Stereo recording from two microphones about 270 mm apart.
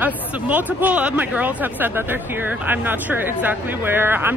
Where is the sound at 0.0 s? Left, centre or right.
Centre.